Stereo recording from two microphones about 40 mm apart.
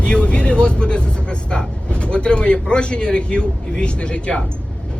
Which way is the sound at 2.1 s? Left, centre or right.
Left.